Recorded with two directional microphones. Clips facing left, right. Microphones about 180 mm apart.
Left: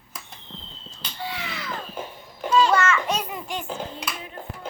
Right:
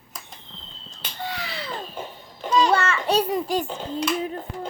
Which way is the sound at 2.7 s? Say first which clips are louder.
Right 1 dB; 35° right (ahead or behind).